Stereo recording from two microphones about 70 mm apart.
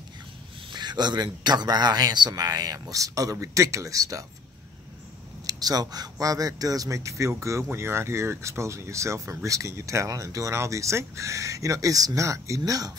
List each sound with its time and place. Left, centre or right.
0.7 s a man's voice: right
5.5 s a man's voice: right